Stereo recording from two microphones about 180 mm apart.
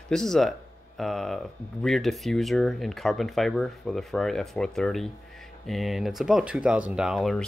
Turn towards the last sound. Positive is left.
turn(degrees=0)  # may be behind; listen again after turning